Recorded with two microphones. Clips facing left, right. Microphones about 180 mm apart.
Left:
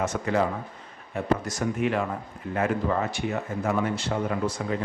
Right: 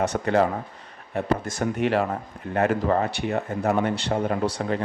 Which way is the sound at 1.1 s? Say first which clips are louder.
Right 1 dB; 60° right (ahead or behind).